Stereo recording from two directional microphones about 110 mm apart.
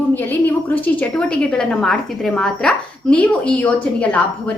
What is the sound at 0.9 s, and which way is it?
A woman's voice, 10° left (ahead or behind).